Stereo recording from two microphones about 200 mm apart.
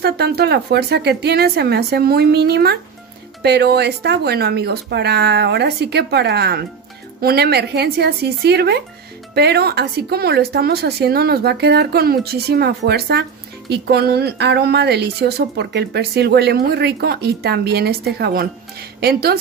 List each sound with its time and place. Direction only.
0.0 s a woman's voice: 55° right (ahead or behind)